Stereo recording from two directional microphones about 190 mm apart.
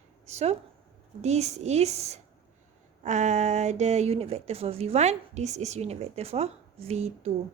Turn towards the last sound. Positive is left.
turn(degrees=-30)  # may be behind; listen again after turning